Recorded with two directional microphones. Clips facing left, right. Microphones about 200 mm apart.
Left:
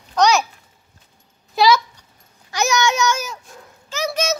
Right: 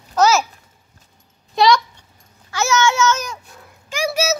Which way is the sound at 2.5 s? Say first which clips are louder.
Right 1 dB; 15° left (ahead or behind).